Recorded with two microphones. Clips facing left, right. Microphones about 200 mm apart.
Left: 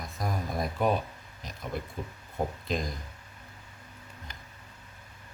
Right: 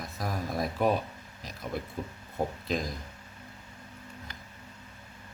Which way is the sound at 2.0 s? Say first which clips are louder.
Right 1 dB; 35° right (ahead or behind).